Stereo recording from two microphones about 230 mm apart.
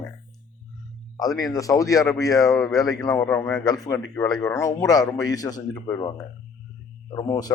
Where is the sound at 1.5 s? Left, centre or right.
Centre.